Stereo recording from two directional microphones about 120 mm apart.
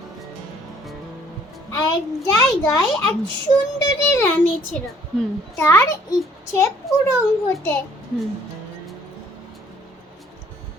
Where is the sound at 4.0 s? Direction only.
25° left (ahead or behind).